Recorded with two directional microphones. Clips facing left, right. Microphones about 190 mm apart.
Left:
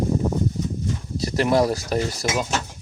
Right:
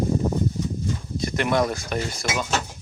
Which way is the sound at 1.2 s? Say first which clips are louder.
Left 3 dB; 35° left (ahead or behind).